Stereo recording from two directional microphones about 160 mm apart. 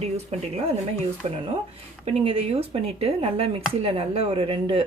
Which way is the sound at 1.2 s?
40° right (ahead or behind).